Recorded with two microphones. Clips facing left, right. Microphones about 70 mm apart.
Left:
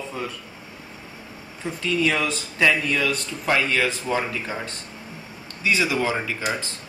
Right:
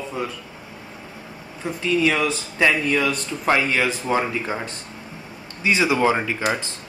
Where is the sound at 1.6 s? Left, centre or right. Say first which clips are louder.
Right 3 dB; centre.